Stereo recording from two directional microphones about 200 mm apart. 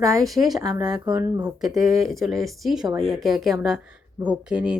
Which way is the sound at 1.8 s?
Centre (ahead or behind).